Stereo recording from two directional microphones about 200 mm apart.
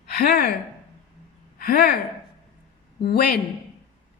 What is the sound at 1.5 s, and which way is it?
Speech, 50° left (ahead or behind).